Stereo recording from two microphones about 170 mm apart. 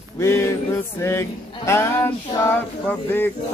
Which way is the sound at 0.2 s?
15° left (ahead or behind).